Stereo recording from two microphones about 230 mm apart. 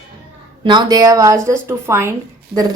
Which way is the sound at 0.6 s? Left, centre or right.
Centre.